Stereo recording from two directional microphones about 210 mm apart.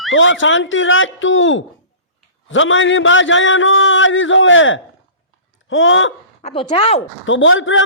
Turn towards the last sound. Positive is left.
turn(degrees=65)  # may be behind; listen again after turning